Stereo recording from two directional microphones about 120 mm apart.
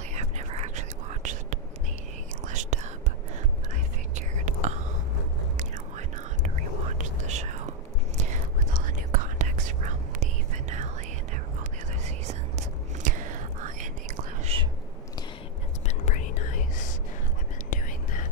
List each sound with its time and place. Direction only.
0.1 s whispering: 70° right (ahead or behind); by 2.9 s 90° right
4.1 s whispering: 75° right (ahead or behind)
8.2 s whispering: 90° right
12.0 s whispering: 75° right (ahead or behind)
14.5 s whispering: 55° right (ahead or behind)
15.9 s whispering: 85° left